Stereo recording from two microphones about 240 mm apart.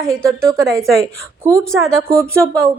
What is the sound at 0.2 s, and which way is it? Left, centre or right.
A woman's voice, centre.